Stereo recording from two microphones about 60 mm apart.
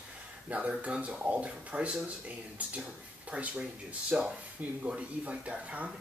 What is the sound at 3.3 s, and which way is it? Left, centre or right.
Speech, right.